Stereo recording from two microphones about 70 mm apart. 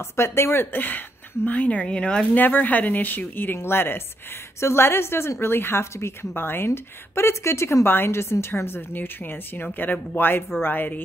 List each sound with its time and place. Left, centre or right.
0.0 s speech: left; by 2.4 s centre
2.4 s a woman's voice: left